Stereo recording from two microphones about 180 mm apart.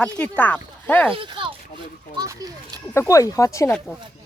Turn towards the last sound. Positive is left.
turn(degrees=15)  # may be behind; listen again after turning